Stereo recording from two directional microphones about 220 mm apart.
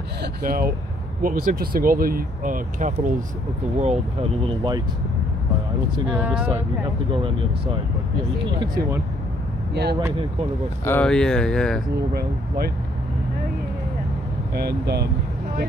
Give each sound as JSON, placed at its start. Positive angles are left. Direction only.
{"t": 0.2, "sound": "speech", "side_deg": -40}
{"t": 6.1, "sound": "speech", "side_deg": -5}
{"t": 7.1, "sound": "speech", "side_deg": -25}
{"t": 9.8, "sound": "speech", "side_deg": -50}
{"t": 10.9, "sound": "speech", "side_deg": 5}
{"t": 12.1, "sound": "speech", "side_deg": -45}
{"t": 14.5, "sound": "speech", "side_deg": -45}